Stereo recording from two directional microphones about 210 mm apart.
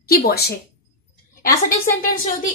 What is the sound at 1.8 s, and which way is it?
Speech, 40° left (ahead or behind).